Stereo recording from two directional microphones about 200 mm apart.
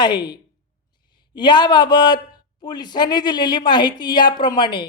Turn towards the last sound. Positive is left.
turn(degrees=20)  # may be behind; listen again after turning